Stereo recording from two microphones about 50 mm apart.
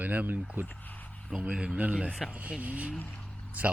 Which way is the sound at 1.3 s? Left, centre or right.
Centre.